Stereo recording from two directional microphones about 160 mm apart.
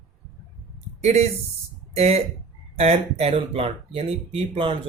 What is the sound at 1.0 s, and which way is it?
Speech, 45° right (ahead or behind).